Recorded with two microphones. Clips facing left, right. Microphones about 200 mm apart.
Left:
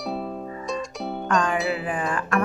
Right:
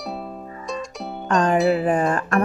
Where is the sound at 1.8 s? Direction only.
40° right (ahead or behind).